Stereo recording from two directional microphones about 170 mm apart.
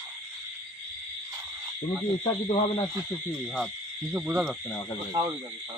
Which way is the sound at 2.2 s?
40° left (ahead or behind).